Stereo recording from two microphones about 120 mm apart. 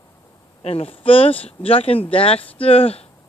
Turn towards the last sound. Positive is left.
turn(degrees=55)  # may be behind; listen again after turning